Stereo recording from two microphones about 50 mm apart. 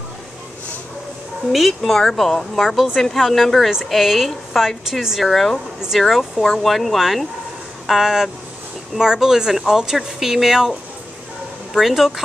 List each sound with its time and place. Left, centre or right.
1.5 s a woman's voice: centre
2.6 s a woman's voice: centre
3.0 s a woman's voice: centre
11.7 s speech: centre